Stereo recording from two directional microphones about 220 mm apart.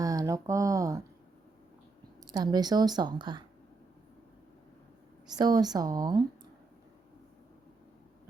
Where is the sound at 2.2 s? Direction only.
20° right (ahead or behind).